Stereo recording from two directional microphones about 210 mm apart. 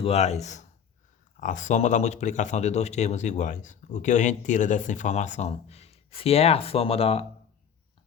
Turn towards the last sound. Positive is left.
turn(degrees=30)  # may be behind; listen again after turning